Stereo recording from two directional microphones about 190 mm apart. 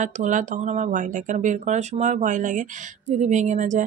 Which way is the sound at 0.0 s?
40° right (ahead or behind).